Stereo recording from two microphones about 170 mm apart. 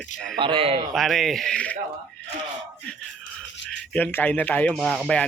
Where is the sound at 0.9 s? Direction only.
Centre (ahead or behind).